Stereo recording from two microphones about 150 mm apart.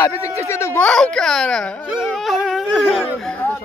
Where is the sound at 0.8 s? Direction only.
5° left (ahead or behind).